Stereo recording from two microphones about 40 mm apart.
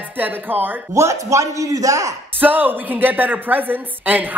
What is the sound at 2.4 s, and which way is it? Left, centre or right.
A woman's voice, right.